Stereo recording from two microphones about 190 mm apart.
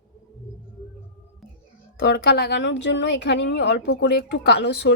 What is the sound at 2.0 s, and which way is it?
A woman's voice, 55° left (ahead or behind).